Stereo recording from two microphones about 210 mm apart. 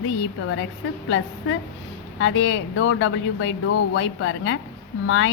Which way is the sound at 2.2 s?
65° left (ahead or behind).